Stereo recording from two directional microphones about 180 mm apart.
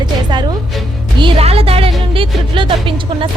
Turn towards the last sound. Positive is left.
turn(degrees=-30)  # may be behind; listen again after turning